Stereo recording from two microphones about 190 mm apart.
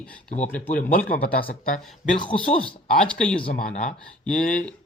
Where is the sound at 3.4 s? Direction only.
45° left (ahead or behind).